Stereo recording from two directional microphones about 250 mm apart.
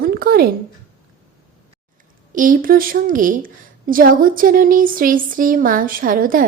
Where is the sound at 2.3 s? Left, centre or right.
Right.